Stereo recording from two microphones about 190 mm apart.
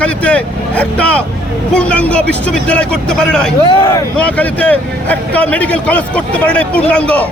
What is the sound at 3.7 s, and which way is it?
Speech, 25° left (ahead or behind).